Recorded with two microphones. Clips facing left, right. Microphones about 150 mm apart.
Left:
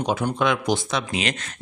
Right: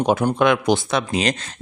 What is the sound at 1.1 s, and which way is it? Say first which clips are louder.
Speech: right 6 dB; 35° right (ahead or behind).